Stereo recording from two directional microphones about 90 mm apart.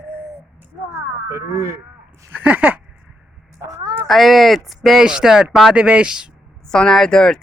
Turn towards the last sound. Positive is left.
turn(degrees=5)  # may be behind; listen again after turning